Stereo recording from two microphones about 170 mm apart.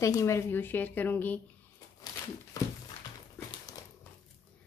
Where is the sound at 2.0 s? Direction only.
20° left (ahead or behind).